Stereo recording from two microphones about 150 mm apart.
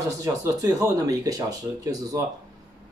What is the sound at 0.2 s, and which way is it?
Speech, 25° right (ahead or behind).